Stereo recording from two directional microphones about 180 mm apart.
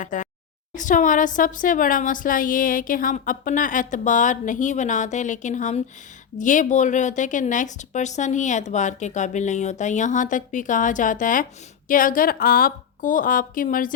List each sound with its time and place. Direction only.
0.0 s a woman's voice: 45° left (ahead or behind)